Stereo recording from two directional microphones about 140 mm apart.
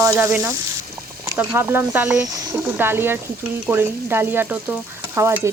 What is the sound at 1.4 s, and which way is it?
Stir, 15° right (ahead or behind).